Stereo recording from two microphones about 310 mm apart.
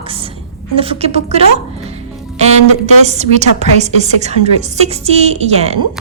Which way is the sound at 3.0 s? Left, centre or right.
Right.